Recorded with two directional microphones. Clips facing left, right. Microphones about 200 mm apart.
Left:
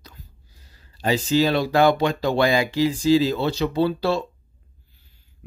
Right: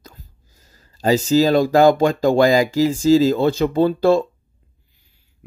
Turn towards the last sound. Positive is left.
turn(degrees=-50)  # may be behind; listen again after turning